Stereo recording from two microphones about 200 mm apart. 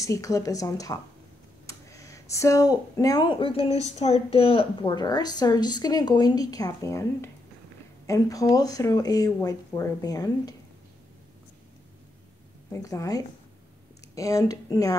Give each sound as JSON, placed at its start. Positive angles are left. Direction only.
{"t": 0.0, "sound": "speech", "side_deg": 15}
{"t": 12.7, "sound": "speech", "side_deg": 15}